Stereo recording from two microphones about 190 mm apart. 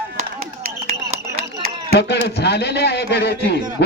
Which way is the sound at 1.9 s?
60° left (ahead or behind).